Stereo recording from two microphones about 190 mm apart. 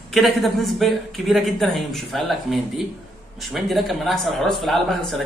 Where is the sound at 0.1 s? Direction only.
Centre (ahead or behind).